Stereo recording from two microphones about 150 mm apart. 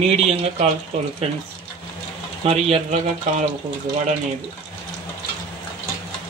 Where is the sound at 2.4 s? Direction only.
45° right (ahead or behind).